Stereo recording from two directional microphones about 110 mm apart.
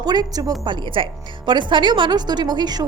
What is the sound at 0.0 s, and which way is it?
A woman's voice, 40° right (ahead or behind).